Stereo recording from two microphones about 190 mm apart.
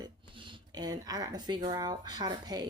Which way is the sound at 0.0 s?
20° right (ahead or behind).